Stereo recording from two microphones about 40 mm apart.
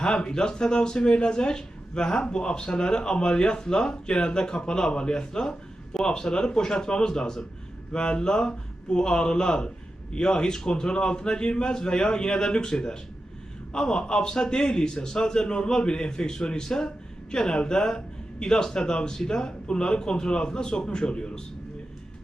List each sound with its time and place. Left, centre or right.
0.0 s speech: left